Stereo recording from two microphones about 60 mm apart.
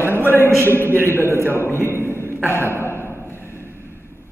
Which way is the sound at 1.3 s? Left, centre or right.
Right.